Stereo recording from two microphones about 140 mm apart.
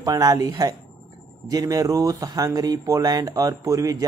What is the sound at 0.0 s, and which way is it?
Speech, 25° right (ahead or behind).